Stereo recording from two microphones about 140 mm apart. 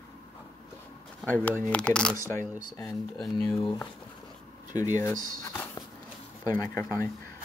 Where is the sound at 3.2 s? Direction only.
5° left (ahead or behind).